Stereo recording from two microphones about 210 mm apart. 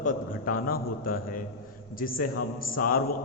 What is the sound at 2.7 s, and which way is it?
Speech, 45° left (ahead or behind).